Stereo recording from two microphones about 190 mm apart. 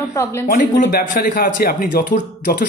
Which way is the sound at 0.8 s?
55° left (ahead or behind).